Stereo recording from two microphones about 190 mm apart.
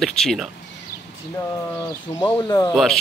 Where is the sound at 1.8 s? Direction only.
15° left (ahead or behind).